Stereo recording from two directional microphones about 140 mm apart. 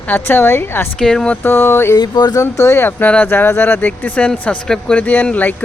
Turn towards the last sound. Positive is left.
turn(degrees=10)  # may be behind; listen again after turning